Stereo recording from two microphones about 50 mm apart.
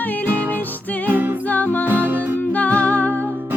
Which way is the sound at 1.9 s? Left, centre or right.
Right.